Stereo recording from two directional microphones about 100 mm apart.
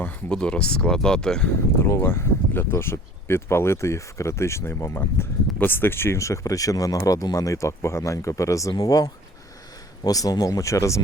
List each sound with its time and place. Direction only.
0.3 s speech: 10° left (ahead or behind)
1.8 s speech: 25° left (ahead or behind)